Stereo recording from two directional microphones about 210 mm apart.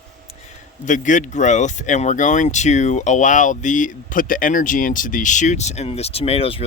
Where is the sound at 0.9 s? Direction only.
35° left (ahead or behind).